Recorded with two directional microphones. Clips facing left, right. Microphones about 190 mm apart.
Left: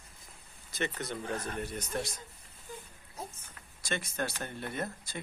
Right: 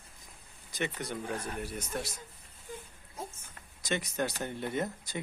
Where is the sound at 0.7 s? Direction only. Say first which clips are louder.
Even; 15° right (ahead or behind).